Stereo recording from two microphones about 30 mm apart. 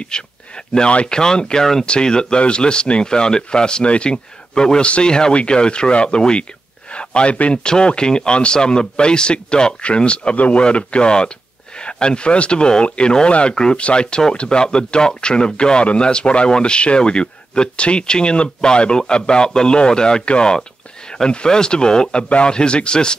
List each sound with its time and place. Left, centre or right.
0.1 s speech: left
10.3 s speech: left
10.6 s speech: left
14.6 s speech: left